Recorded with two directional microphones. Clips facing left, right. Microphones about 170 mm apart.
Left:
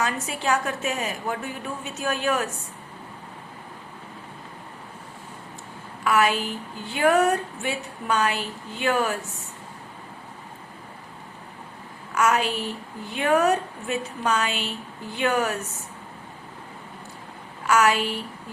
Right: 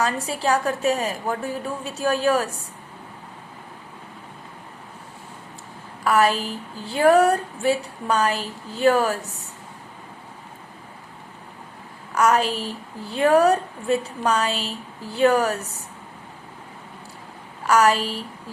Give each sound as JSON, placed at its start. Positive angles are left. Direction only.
{"t": 0.0, "sound": "a woman's voice", "side_deg": -35}
{"t": 6.1, "sound": "a woman's voice", "side_deg": -35}
{"t": 12.1, "sound": "a woman's voice", "side_deg": -35}
{"t": 17.7, "sound": "a woman's voice", "side_deg": -35}